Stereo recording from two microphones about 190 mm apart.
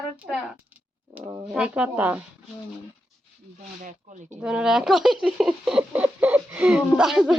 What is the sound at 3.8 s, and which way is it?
Speech, 40° right (ahead or behind).